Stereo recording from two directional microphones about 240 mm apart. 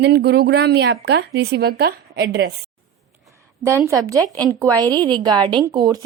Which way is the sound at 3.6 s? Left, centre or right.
Centre.